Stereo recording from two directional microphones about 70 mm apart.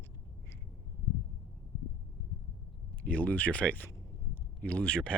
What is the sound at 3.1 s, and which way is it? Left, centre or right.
Speech, centre.